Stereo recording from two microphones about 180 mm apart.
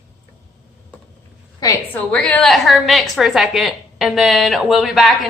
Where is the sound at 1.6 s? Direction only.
20° left (ahead or behind).